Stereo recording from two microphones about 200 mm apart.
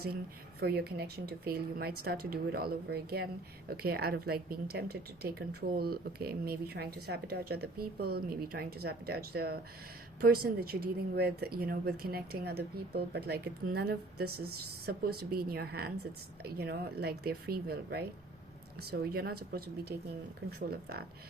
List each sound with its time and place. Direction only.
0.6 s speech: 55° right (ahead or behind)